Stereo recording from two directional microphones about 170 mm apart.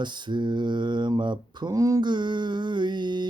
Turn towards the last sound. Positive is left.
turn(degrees=-25)  # may be behind; listen again after turning